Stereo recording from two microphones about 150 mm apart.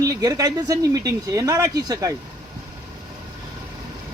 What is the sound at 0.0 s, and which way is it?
Speech, 25° right (ahead or behind).